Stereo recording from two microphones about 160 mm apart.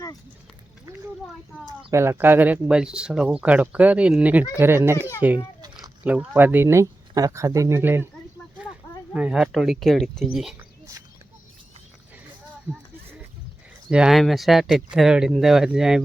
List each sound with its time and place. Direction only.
1.6 s speech: 20° right (ahead or behind)
5.6 s cat: 25° right (ahead or behind)
6.0 s speech: 10° right (ahead or behind)
9.1 s speech: 5° right (ahead or behind)
13.9 s speech: 5° right (ahead or behind)